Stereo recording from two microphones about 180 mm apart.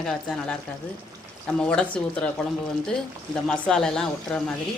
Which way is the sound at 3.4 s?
5° left (ahead or behind).